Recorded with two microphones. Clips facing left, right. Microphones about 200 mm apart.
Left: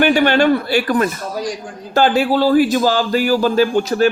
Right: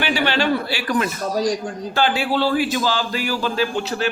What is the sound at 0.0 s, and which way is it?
A man's voice, 45° left (ahead or behind).